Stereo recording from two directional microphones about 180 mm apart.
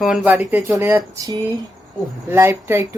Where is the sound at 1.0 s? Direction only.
25° right (ahead or behind).